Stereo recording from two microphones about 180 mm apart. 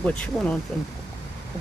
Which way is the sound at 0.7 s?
Centre (ahead or behind).